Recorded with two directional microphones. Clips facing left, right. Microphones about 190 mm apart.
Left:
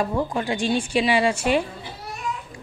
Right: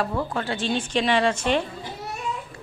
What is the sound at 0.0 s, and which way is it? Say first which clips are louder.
Speech: left 2 dB; 15° left (ahead or behind).